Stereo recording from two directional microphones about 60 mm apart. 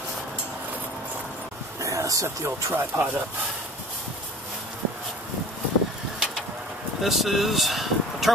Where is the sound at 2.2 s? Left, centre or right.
Right.